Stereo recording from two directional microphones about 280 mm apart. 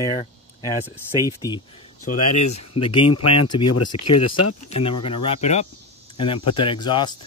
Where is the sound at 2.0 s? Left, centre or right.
Left.